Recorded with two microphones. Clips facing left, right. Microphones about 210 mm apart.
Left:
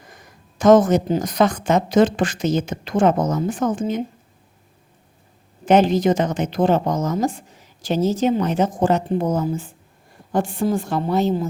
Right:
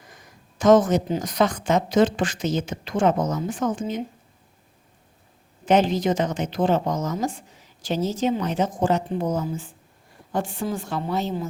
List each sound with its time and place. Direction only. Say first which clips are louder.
0.6 s speech: left 3 dB; 50° left (ahead or behind)
5.6 s speech: left 4 dB; 50° left (ahead or behind)